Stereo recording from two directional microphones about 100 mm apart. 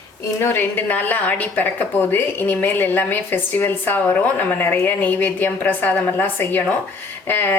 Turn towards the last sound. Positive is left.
turn(degrees=20)  # may be behind; listen again after turning